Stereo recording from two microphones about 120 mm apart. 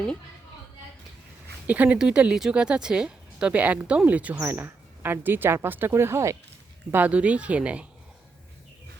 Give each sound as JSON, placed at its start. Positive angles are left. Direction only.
{"t": 1.6, "sound": "speech", "side_deg": -15}